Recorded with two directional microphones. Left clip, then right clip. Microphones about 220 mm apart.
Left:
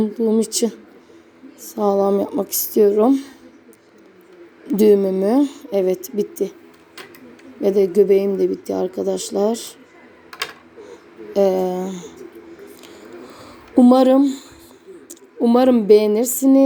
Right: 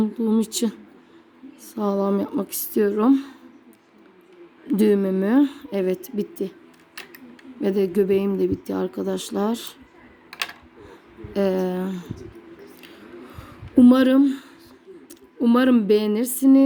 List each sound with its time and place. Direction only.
0.0 s speech: 25° right (ahead or behind)
4.7 s speech: 20° right (ahead or behind)
7.6 s speech: 25° right (ahead or behind)
11.3 s speech: 20° right (ahead or behind)
13.4 s speech: 25° right (ahead or behind)